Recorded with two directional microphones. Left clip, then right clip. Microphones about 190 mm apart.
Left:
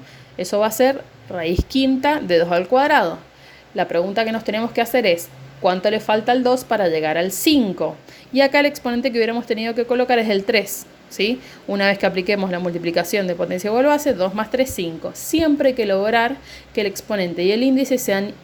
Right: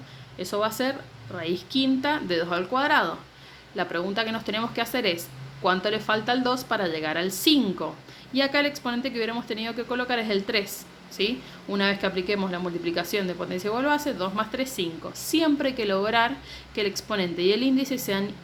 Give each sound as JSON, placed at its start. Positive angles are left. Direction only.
{"t": 0.3, "sound": "a woman's voice", "side_deg": 30}